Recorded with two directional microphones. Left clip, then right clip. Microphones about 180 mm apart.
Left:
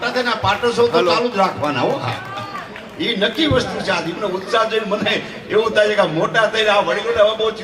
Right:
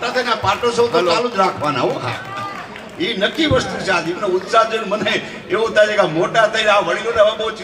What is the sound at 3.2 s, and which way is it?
Speech, 15° left (ahead or behind).